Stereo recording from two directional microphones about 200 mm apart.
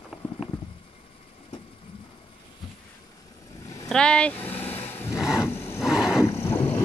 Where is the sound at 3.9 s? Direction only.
5° left (ahead or behind).